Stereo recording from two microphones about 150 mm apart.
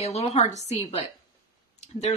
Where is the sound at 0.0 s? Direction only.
45° left (ahead or behind).